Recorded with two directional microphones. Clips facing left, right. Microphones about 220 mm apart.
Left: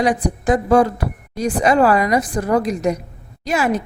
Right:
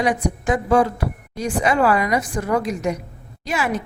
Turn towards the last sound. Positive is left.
turn(degrees=40)  # may be behind; listen again after turning